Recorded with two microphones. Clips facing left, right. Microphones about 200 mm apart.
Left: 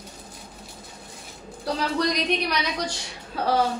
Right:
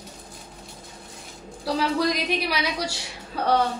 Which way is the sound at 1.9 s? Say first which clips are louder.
Even; 5° right (ahead or behind).